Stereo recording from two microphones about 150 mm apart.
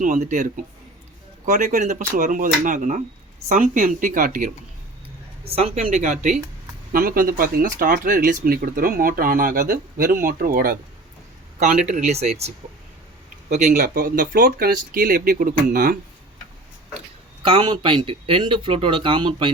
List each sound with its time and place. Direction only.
0.0 s speech: 55° right (ahead or behind)
5.5 s speech: 40° right (ahead or behind)
6.9 s speech: 80° right
11.9 s speech: 50° right (ahead or behind)
13.7 s speech: 65° right (ahead or behind)
17.4 s speech: 35° right (ahead or behind)